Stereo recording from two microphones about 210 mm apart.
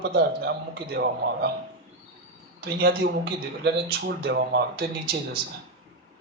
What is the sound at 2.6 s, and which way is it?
Speech, 50° right (ahead or behind).